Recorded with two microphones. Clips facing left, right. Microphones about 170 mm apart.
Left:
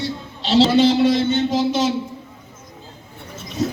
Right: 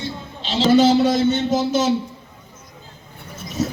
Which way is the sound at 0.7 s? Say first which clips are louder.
Even; 45° right (ahead or behind).